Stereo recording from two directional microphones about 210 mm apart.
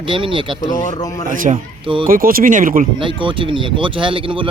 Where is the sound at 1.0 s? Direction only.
15° left (ahead or behind).